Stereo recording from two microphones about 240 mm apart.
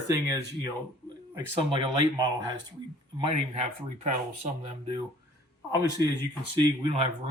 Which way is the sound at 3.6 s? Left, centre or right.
Right.